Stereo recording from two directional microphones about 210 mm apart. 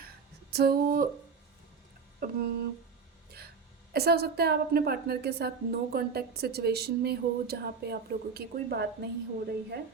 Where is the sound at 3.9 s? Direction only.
50° right (ahead or behind).